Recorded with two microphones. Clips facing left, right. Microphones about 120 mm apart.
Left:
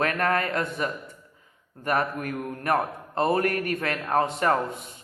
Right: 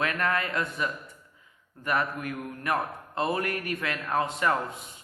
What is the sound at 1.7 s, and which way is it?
A man's voice, 40° left (ahead or behind).